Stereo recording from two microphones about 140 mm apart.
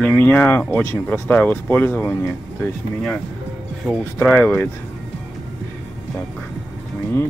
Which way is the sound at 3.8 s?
Centre (ahead or behind).